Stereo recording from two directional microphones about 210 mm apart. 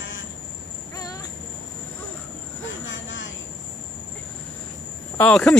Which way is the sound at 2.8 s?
65° left (ahead or behind).